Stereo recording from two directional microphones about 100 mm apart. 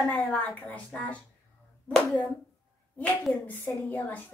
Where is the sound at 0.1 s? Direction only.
15° left (ahead or behind).